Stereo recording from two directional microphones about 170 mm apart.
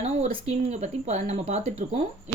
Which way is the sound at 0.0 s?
40° right (ahead or behind).